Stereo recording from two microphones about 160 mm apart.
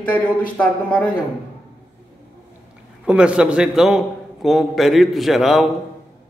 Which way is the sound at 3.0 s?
5° right (ahead or behind).